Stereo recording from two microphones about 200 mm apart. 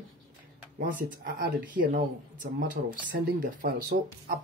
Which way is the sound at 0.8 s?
45° right (ahead or behind).